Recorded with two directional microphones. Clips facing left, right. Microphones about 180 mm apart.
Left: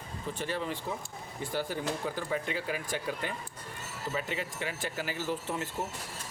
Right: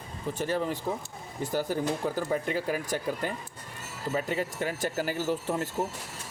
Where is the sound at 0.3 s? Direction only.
45° right (ahead or behind).